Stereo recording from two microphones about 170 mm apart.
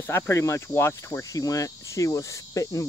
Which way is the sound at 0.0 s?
15° left (ahead or behind).